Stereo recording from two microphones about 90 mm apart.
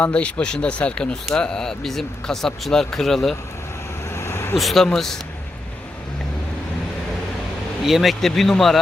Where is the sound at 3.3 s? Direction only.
30° left (ahead or behind).